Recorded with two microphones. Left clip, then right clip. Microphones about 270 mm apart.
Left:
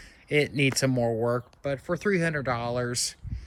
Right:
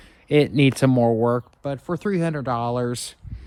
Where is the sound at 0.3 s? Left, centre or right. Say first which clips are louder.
Right 6 dB; right.